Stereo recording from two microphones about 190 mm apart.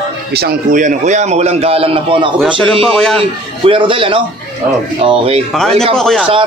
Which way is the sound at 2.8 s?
5° left (ahead or behind).